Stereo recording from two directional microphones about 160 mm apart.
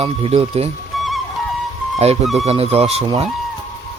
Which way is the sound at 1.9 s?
40° right (ahead or behind).